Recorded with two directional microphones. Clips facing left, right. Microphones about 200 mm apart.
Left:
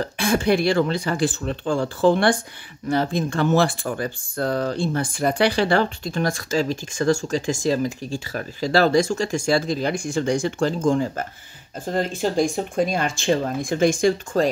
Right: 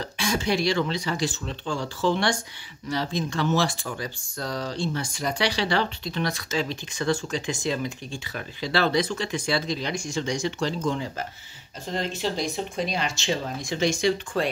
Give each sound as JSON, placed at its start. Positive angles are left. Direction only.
{"t": 0.0, "sound": "speech", "side_deg": 55}